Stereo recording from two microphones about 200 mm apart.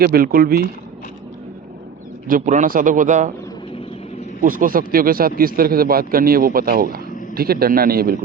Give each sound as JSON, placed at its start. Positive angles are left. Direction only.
{"t": 0.0, "sound": "speech", "side_deg": -45}
{"t": 2.2, "sound": "a man's voice", "side_deg": -40}
{"t": 4.4, "sound": "speech", "side_deg": -45}